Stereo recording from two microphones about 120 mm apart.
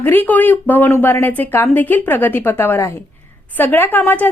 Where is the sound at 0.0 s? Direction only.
15° left (ahead or behind).